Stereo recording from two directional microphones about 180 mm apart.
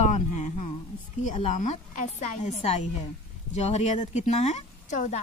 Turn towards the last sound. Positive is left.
turn(degrees=40)  # may be behind; listen again after turning